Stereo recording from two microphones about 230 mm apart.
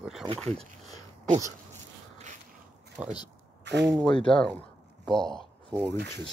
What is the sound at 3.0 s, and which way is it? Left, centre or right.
Speech, centre.